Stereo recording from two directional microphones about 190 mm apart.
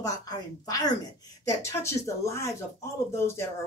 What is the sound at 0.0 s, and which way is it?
A woman's voice, 20° left (ahead or behind).